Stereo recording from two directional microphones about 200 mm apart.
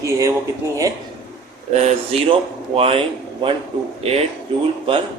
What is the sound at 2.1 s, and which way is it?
Speech, 30° right (ahead or behind).